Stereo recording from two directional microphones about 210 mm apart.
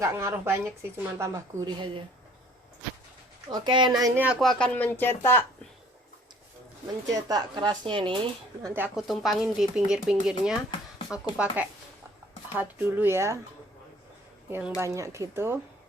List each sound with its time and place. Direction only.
0.0 s a woman's voice: 15° right (ahead or behind)
3.5 s speech: 20° right (ahead or behind); by 5.5 s 10° left (ahead or behind)
7.1 s a woman's voice: 15° right (ahead or behind)
8.6 s speech: 10° right (ahead or behind)
14.8 s speech: 15° right (ahead or behind)